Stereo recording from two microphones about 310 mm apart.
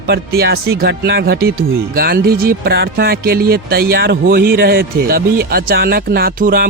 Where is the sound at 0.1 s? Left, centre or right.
Right.